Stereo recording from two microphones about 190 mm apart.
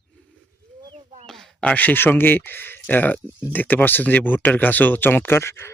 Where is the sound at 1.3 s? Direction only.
Centre (ahead or behind).